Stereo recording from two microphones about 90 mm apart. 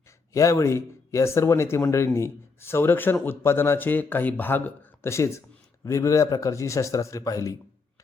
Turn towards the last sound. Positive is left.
turn(degrees=40)  # may be behind; listen again after turning